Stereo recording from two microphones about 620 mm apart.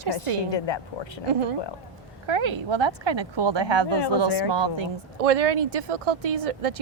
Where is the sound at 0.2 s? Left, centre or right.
Left.